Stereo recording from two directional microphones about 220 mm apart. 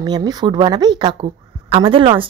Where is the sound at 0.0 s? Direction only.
20° right (ahead or behind).